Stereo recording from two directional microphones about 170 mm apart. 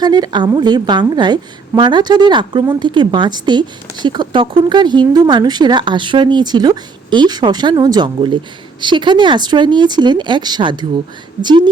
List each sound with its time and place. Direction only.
0.0 s a woman's voice: 25° right (ahead or behind)